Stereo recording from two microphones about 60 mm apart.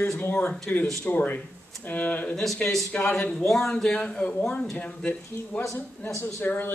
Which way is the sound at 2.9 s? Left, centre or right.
Left.